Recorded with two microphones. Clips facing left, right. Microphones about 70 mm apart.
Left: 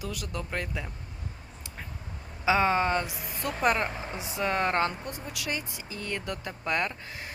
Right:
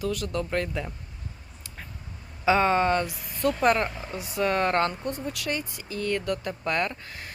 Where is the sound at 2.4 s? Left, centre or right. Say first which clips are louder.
Right 3 dB; centre.